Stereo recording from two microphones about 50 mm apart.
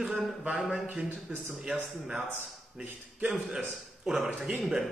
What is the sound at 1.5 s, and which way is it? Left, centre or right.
Speech, centre.